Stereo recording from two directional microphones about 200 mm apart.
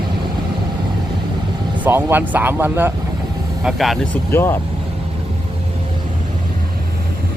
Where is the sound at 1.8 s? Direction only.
10° right (ahead or behind).